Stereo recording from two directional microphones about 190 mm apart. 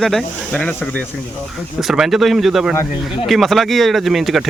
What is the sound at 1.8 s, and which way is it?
Speech, centre (ahead or behind).